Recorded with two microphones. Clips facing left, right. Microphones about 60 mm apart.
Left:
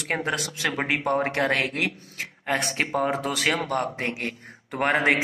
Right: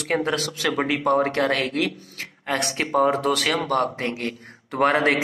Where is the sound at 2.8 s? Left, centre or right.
Centre.